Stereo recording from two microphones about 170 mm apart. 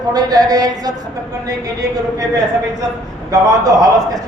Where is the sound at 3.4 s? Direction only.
20° right (ahead or behind).